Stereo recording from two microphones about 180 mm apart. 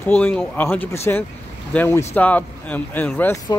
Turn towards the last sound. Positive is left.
turn(degrees=10)  # may be behind; listen again after turning